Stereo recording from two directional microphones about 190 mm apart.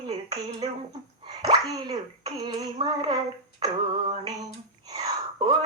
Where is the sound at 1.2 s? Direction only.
20° right (ahead or behind).